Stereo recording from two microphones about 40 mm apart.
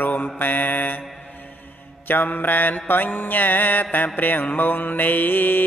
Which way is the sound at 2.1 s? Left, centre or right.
Left.